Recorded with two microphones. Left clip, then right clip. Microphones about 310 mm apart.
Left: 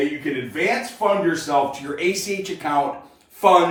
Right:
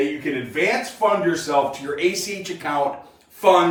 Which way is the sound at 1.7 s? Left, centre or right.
Centre.